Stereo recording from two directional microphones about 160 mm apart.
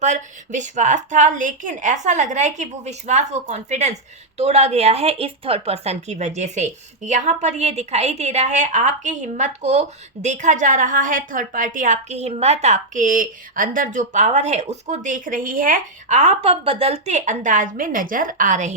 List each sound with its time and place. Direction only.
0.0 s a woman's voice: 50° right (ahead or behind)